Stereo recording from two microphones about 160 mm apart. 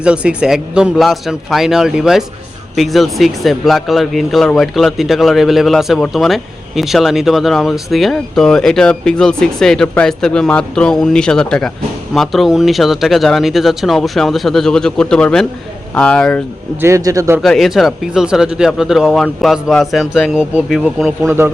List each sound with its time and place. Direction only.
0.0 s speech: 5° right (ahead or behind)
16.8 s a man's voice: 20° right (ahead or behind)
17.4 s speech: centre (ahead or behind)
21.2 s speech: 15° right (ahead or behind)